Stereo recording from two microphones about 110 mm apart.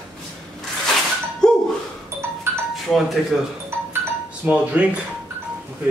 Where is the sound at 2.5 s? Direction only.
25° right (ahead or behind).